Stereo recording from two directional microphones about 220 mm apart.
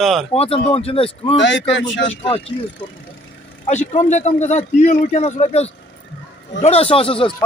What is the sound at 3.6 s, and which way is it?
A man's voice, 30° left (ahead or behind).